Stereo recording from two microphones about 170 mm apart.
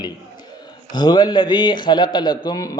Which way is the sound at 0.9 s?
25° left (ahead or behind).